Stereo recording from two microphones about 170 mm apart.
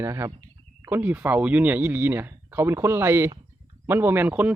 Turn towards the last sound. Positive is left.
turn(degrees=-10)  # may be behind; listen again after turning